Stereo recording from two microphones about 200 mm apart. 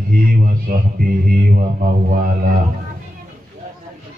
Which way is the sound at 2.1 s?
45° right (ahead or behind).